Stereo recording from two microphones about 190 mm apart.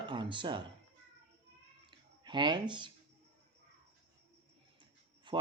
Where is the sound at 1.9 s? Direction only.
25° right (ahead or behind).